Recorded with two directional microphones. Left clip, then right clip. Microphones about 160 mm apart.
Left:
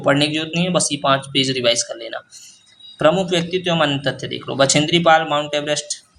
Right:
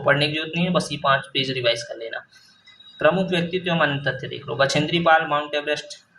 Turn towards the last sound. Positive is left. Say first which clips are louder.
# left 4 dB
turn(degrees=30)  # may be behind; listen again after turning